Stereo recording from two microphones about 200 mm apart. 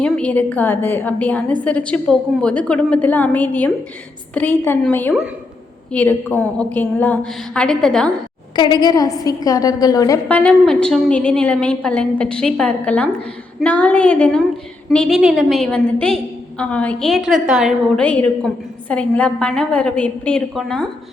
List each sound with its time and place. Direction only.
0.0 s a woman's voice: 5° left (ahead or behind)
8.5 s a woman's voice: 20° left (ahead or behind); by 20.8 s centre (ahead or behind)